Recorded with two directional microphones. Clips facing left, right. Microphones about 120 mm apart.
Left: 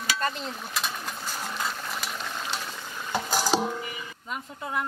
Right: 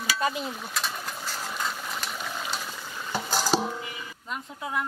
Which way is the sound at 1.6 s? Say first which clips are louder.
Even; centre (ahead or behind).